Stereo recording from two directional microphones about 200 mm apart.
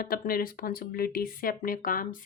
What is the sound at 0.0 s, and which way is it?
Speech, 45° left (ahead or behind).